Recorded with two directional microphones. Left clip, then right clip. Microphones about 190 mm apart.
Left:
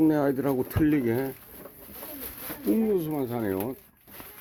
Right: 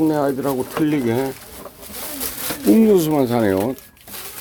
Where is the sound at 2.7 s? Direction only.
20° right (ahead or behind).